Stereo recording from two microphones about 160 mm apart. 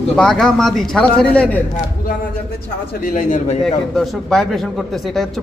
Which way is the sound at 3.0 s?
55° left (ahead or behind).